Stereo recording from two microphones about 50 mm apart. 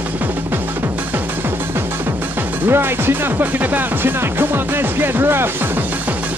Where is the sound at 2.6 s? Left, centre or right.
Right.